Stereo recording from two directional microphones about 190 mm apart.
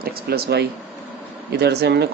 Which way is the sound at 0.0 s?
55° right (ahead or behind).